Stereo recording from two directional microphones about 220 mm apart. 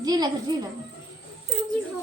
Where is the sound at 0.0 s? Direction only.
20° right (ahead or behind).